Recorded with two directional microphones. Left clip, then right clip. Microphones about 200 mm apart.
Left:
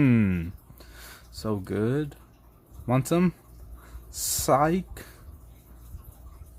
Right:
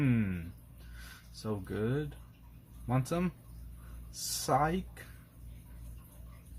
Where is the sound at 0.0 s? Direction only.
50° left (ahead or behind).